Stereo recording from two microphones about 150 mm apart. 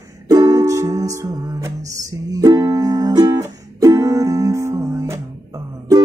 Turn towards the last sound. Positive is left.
turn(degrees=-20)  # may be behind; listen again after turning